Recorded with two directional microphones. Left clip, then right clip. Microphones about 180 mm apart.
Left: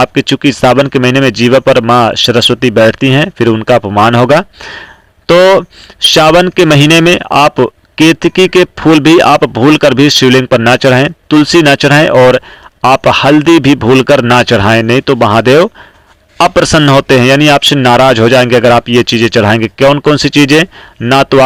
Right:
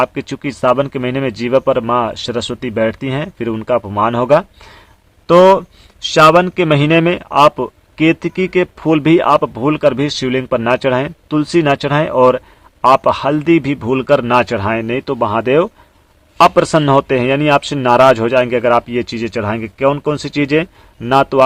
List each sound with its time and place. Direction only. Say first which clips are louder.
0.0 s speech: left 9 dB; 30° left (ahead or behind)
6.1 s a man's voice: left 2 dB; 35° left (ahead or behind)
18.9 s a man's voice: left 12 dB; 30° left (ahead or behind)